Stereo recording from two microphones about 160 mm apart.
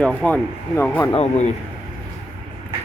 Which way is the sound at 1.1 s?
40° left (ahead or behind).